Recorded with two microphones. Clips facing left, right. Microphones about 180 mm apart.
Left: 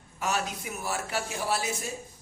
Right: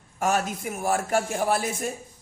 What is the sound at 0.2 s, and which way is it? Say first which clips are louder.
A man's voice: right 6 dB; 50° right (ahead or behind).